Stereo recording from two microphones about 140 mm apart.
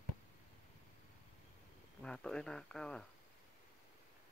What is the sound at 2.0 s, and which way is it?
Speech, 5° left (ahead or behind).